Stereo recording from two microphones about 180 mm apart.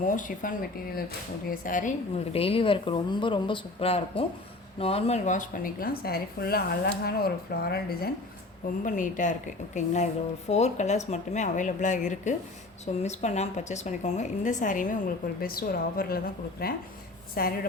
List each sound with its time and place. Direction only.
0.0 s a woman's voice: 45° left (ahead or behind)
2.3 s speech: 30° left (ahead or behind); by 8.1 s 60° left (ahead or behind)
8.8 s a woman's voice: 45° left (ahead or behind)